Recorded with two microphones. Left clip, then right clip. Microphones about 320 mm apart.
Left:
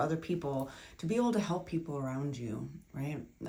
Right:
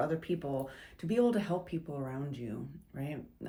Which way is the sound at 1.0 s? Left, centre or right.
Centre.